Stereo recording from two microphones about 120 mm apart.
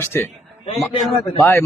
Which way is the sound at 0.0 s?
20° left (ahead or behind).